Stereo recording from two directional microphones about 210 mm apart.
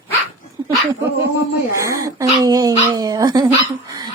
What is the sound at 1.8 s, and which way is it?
Speech, 15° right (ahead or behind).